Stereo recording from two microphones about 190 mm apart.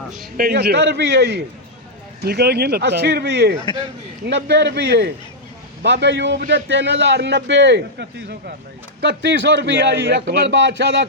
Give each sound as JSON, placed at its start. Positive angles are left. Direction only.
{"t": 0.3, "sound": "a man's voice", "side_deg": -50}